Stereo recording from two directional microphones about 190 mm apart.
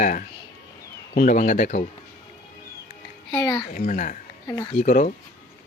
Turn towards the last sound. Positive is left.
turn(degrees=45)  # may be behind; listen again after turning